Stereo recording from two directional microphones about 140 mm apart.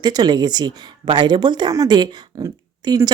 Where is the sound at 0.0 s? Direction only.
30° right (ahead or behind).